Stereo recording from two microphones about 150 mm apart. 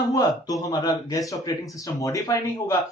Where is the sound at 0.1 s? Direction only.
25° left (ahead or behind).